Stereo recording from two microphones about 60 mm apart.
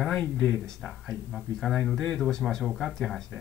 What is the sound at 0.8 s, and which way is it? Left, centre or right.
Speech, centre.